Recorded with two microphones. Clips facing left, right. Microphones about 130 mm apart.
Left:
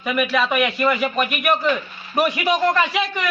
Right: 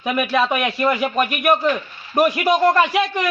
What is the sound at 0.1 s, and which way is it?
Speech, 30° right (ahead or behind).